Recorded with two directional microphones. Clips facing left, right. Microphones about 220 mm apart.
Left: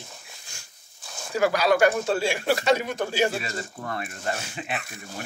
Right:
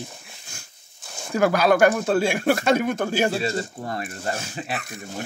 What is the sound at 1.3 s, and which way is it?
Speech, 50° right (ahead or behind).